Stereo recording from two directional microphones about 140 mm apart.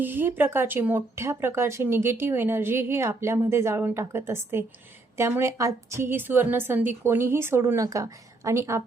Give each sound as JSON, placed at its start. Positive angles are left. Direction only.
{"t": 0.0, "sound": "a woman's voice", "side_deg": -15}